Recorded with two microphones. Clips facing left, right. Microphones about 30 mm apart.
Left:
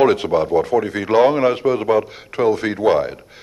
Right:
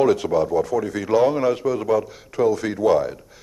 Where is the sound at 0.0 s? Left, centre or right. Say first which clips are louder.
Left 3 dB; left.